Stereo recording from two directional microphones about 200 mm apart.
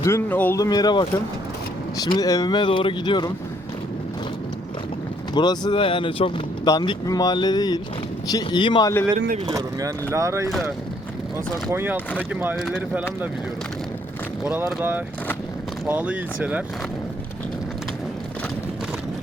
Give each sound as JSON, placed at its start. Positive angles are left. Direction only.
{"t": 0.0, "sound": "speech", "side_deg": 10}
{"t": 5.3, "sound": "speech", "side_deg": 20}
{"t": 9.5, "sound": "speech", "side_deg": -15}
{"t": 11.7, "sound": "speech", "side_deg": -10}
{"t": 14.4, "sound": "speech", "side_deg": -10}